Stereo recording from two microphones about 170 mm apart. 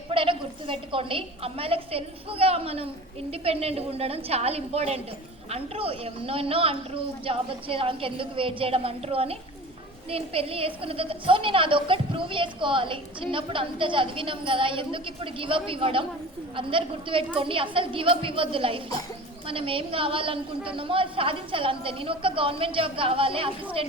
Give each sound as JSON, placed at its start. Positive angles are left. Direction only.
{"t": 0.1, "sound": "a woman's voice", "side_deg": -30}